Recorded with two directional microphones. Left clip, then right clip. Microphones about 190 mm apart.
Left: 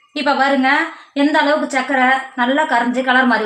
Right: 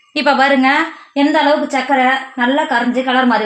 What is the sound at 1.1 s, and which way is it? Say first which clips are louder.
A woman's voice: right 2 dB; 35° right (ahead or behind).